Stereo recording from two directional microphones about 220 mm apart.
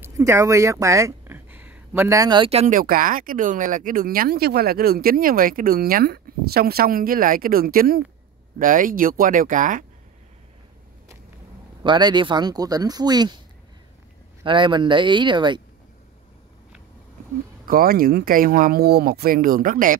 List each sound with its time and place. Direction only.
0.0 s speech: 15° right (ahead or behind); by 9.8 s 35° right (ahead or behind)
11.8 s speech: 20° right (ahead or behind)
14.4 s speech: 20° right (ahead or behind)
17.6 s speech: 40° right (ahead or behind)